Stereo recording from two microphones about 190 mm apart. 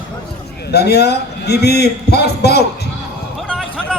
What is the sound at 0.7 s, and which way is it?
A man's voice, 60° left (ahead or behind).